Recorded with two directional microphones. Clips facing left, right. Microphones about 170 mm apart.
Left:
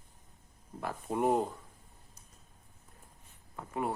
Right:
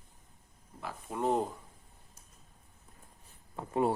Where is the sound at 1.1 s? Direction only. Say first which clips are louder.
Left 2 dB; 15° left (ahead or behind).